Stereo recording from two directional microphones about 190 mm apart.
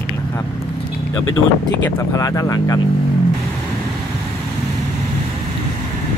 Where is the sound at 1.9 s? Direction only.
15° left (ahead or behind).